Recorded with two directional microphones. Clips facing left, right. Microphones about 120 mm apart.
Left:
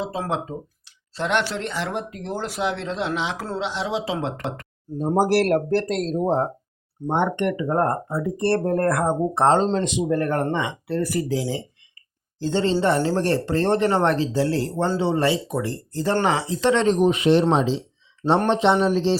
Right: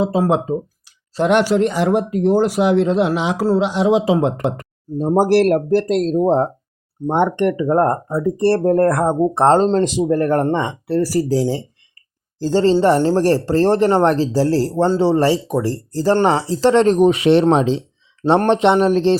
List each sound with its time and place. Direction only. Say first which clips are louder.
0.0 s speech: right 10 dB; 10° right (ahead or behind)
4.9 s speech: right 5 dB; 30° right (ahead or behind)
5.5 s speech: right 5 dB; 10° right (ahead or behind)
6.0 s speech: right 6 dB; 20° right (ahead or behind)
7.1 s speech: right 5 dB; 40° right (ahead or behind)
17.0 s speech: right 5 dB; 70° right (ahead or behind)
17.4 s speech: right 5 dB; 60° right (ahead or behind)